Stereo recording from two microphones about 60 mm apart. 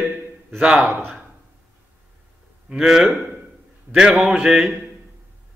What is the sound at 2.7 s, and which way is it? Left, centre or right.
Mantra, centre.